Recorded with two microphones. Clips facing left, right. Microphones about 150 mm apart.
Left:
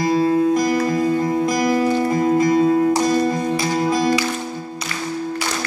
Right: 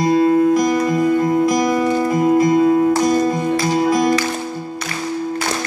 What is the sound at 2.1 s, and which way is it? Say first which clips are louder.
Music: right 5 dB; 20° right (ahead or behind).